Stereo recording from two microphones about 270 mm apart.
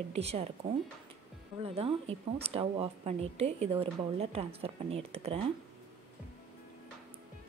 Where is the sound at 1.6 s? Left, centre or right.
Right.